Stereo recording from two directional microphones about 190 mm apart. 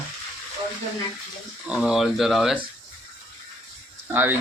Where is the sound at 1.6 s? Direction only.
5° right (ahead or behind).